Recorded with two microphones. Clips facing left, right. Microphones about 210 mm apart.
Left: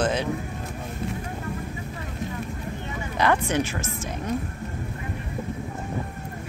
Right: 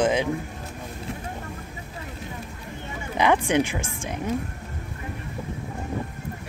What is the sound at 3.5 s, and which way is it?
Speech, 15° right (ahead or behind).